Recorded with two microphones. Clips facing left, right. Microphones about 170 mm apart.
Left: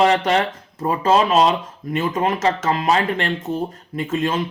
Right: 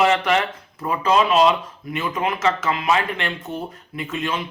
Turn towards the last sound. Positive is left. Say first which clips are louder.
# left 5 dB
turn(degrees=45)  # may be behind; listen again after turning